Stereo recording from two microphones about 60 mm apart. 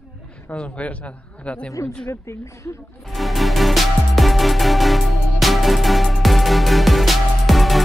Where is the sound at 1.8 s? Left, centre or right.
Left.